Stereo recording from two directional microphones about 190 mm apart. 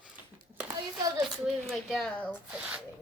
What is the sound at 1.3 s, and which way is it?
Speech, centre (ahead or behind).